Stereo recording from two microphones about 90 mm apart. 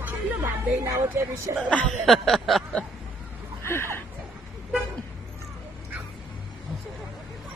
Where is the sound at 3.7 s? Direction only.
25° left (ahead or behind).